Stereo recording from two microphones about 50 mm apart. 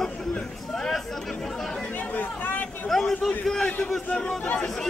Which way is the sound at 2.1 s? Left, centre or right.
Left.